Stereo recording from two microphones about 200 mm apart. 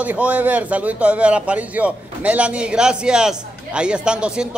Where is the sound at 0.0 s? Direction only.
10° right (ahead or behind).